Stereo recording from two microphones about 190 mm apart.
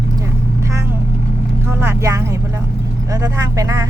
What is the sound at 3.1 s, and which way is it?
Speech, 15° right (ahead or behind).